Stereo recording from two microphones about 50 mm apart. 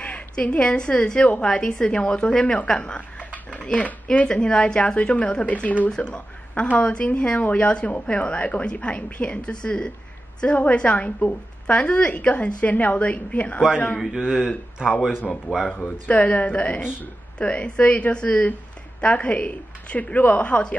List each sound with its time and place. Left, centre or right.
0.0 s a woman's voice: left
4.3 s a woman's voice: centre
14.1 s speech: centre
16.1 s a woman's voice: left